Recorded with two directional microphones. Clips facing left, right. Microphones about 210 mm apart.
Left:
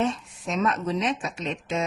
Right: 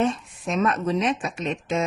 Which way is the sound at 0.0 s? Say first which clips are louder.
Right 3 dB; 55° right (ahead or behind).